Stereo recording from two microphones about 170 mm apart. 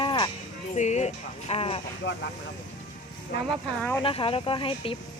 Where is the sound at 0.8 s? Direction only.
45° left (ahead or behind).